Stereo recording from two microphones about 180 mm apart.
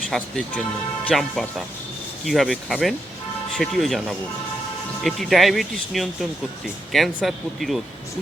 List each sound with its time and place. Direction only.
0.1 s speech: centre (ahead or behind)